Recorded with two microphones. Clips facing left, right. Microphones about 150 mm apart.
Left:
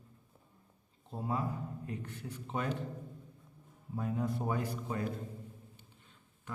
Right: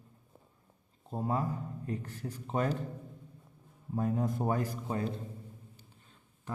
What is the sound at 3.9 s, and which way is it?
A man's voice, 40° right (ahead or behind).